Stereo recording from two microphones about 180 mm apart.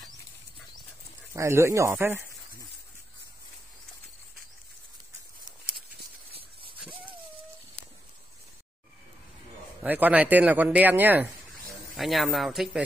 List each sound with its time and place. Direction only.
1.3 s speech: 15° right (ahead or behind)
6.3 s a sound: 30° right (ahead or behind)
9.8 s speech: 10° right (ahead or behind)